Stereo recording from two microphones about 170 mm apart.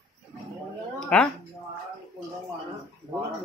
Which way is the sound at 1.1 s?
10° left (ahead or behind).